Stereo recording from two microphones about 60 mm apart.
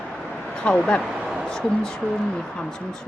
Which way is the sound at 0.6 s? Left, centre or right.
Centre.